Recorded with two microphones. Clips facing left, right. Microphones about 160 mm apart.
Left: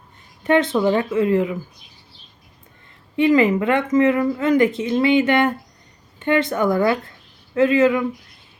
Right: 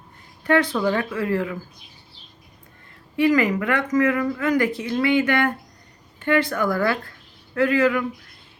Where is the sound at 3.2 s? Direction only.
25° left (ahead or behind).